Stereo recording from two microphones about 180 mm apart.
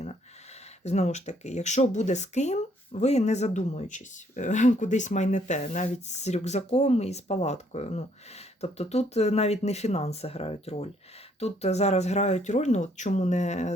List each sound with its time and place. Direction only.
0.9 s speech: 40° left (ahead or behind)